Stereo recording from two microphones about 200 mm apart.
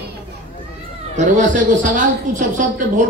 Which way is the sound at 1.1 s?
40° right (ahead or behind).